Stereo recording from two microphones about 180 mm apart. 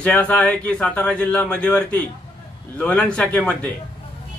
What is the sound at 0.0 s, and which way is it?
A man's voice, 5° left (ahead or behind).